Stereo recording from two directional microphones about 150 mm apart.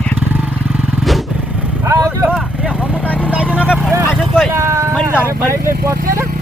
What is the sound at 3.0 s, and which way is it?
Vehicle, 10° left (ahead or behind).